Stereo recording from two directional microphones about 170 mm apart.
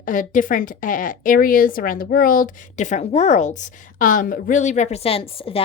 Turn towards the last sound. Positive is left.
turn(degrees=35)  # may be behind; listen again after turning